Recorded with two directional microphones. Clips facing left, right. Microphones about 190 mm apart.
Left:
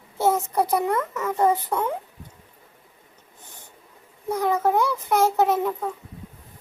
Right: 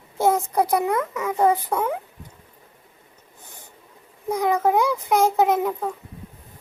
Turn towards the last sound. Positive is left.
turn(degrees=-10)  # may be behind; listen again after turning